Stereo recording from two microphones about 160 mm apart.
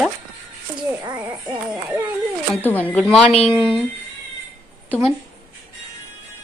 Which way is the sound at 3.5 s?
30° left (ahead or behind).